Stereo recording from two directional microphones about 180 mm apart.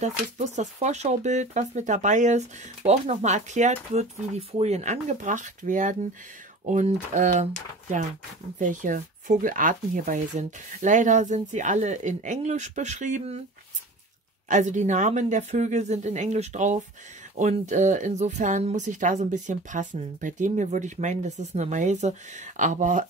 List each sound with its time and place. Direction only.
0.0 s a woman's voice: 40° right (ahead or behind)
8.5 s a woman's voice: 45° right (ahead or behind)
14.5 s a woman's voice: 40° right (ahead or behind)